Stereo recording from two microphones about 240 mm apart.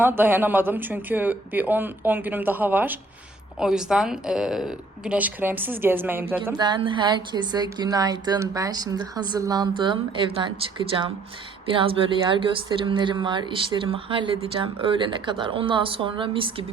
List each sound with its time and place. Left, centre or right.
0.0 s a woman's voice: centre
6.6 s speech: centre